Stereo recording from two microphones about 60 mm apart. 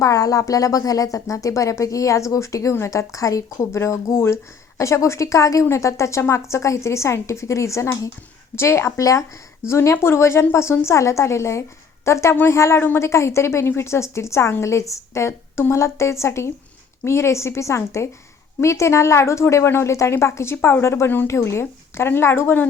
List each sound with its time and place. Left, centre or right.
0.0 s a woman's voice: left
3.7 s a woman's voice: left
5.6 s a woman's voice: left
9.0 s speech: left
9.6 s a woman's voice: left
15.3 s a woman's voice: left
21.2 s a woman's voice: left